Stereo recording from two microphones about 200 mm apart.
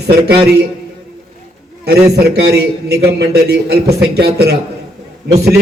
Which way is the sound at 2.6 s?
55° right (ahead or behind).